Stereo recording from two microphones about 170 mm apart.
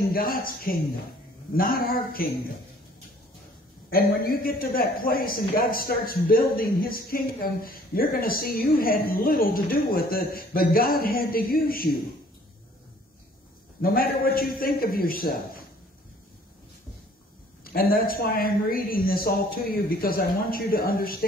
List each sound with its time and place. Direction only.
0.1 s a man's voice: 60° left (ahead or behind)
3.9 s a man's voice: 60° left (ahead or behind)
13.8 s a man's voice: 60° left (ahead or behind)
17.7 s a man's voice: 60° left (ahead or behind)